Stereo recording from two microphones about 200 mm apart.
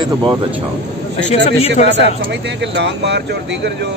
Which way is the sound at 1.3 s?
30° left (ahead or behind).